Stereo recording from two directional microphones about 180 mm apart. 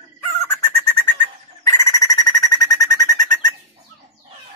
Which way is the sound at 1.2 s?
15° left (ahead or behind).